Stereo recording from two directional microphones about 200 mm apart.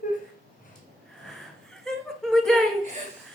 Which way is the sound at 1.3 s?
Centre (ahead or behind).